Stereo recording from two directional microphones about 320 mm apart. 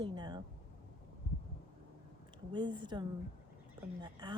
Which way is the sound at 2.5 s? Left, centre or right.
Centre.